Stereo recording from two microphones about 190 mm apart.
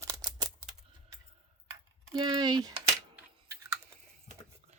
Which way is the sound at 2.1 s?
25° right (ahead or behind).